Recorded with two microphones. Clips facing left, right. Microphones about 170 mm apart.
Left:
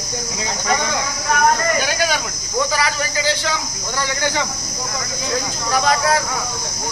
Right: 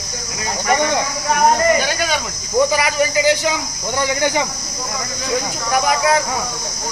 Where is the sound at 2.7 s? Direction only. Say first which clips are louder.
Right 4 dB; 15° right (ahead or behind).